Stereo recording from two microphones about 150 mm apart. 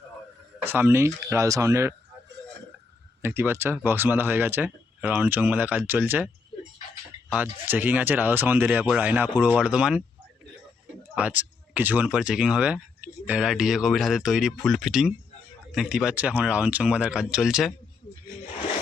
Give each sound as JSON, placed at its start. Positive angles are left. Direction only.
{"t": 0.6, "sound": "speech", "side_deg": -15}
{"t": 3.2, "sound": "speech", "side_deg": -15}
{"t": 11.1, "sound": "speech", "side_deg": -10}